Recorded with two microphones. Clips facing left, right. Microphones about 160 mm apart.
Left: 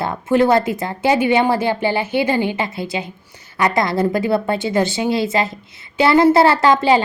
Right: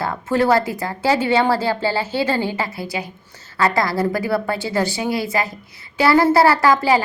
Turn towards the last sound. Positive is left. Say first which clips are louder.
# left 2 dB
turn(degrees=25)  # may be behind; listen again after turning